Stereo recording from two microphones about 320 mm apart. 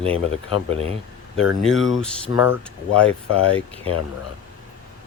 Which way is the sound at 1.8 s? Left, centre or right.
Left.